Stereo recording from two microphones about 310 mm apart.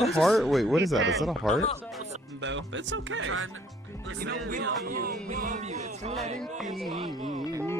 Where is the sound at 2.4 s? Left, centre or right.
Right.